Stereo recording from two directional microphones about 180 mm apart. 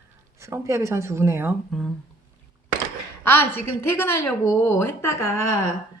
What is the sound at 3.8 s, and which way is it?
Speech, 15° left (ahead or behind).